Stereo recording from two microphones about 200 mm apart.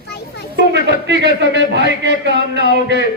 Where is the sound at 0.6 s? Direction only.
55° right (ahead or behind).